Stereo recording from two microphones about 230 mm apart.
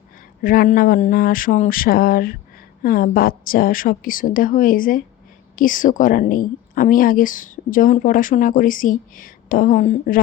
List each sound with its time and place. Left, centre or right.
0.4 s a woman's voice: left